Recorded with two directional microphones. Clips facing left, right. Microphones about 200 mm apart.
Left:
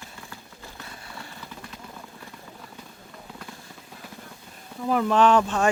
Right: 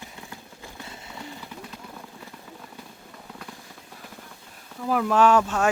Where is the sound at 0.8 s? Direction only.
20° right (ahead or behind).